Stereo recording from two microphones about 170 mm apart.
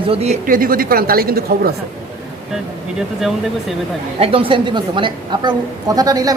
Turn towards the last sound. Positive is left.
turn(degrees=-20)  # may be behind; listen again after turning